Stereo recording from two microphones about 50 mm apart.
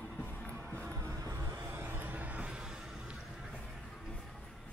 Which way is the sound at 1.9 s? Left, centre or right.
Right.